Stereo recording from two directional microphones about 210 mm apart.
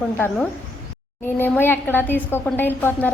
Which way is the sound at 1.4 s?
10° left (ahead or behind).